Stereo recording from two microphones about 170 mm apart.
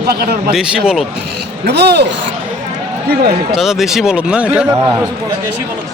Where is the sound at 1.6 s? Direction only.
75° right (ahead or behind).